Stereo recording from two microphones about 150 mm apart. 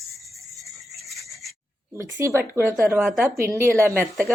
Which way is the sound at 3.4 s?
15° right (ahead or behind).